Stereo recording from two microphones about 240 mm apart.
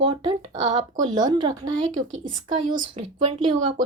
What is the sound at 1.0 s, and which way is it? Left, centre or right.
Speech, centre.